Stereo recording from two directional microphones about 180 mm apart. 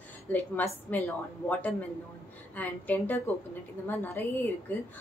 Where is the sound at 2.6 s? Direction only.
10° left (ahead or behind).